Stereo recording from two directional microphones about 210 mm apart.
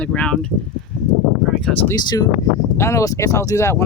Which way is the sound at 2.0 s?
20° left (ahead or behind).